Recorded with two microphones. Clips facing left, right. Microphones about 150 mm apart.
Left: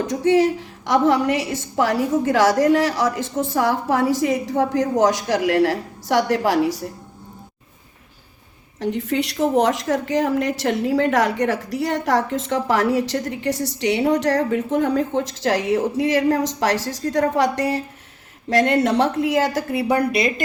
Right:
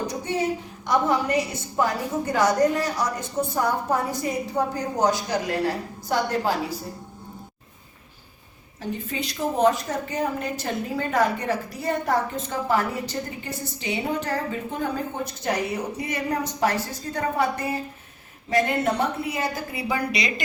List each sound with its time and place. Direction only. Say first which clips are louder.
0.0 s a woman's voice: left 9 dB; 90° left
8.8 s a woman's voice: left 8 dB; 75° left (ahead or behind); by 20.3 s 60° left (ahead or behind)